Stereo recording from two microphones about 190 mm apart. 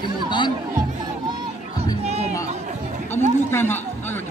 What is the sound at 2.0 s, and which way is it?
Music, 35° right (ahead or behind).